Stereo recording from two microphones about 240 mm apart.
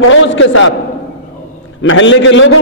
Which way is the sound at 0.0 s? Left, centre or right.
Left.